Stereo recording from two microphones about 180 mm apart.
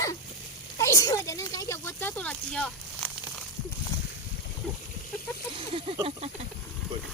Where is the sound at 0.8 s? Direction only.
15° left (ahead or behind).